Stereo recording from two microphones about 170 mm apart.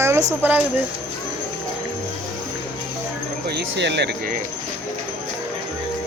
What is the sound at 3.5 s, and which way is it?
Speech, 85° right.